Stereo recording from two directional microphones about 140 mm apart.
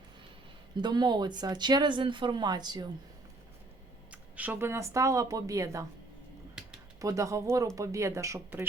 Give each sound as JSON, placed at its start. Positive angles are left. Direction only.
{"t": 0.8, "sound": "speech", "side_deg": -30}
{"t": 4.1, "sound": "speech", "side_deg": -10}
{"t": 6.6, "sound": "a sound", "side_deg": -5}
{"t": 7.0, "sound": "speech", "side_deg": -25}